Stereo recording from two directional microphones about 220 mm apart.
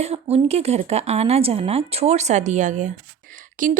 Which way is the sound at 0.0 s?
30° right (ahead or behind).